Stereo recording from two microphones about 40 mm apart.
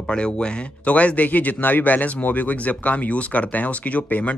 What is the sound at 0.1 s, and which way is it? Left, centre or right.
Speech, left.